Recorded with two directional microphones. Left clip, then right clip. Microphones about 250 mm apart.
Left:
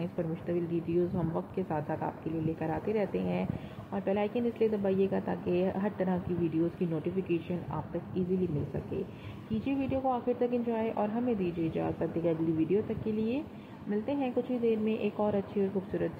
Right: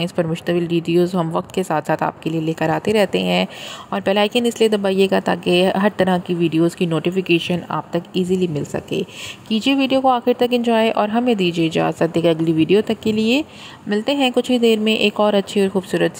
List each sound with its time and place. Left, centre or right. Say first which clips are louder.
0.0 s speech: right 15 dB; right
9.5 s speech: right 16 dB; right